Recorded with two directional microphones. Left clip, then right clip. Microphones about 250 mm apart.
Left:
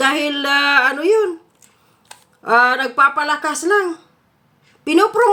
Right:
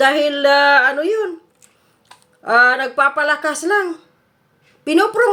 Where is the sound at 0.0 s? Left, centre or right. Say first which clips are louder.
Right 4 dB; centre.